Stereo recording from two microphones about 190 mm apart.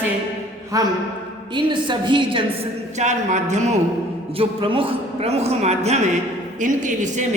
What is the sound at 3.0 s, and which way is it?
A man's voice, 40° right (ahead or behind).